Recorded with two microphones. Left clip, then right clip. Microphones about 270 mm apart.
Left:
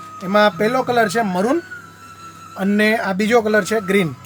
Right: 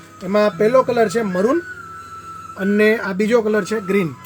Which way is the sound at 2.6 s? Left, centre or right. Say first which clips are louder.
Right 1 dB; left.